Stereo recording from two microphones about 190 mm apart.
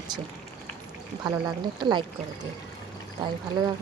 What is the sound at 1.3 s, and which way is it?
Speech, 20° right (ahead or behind).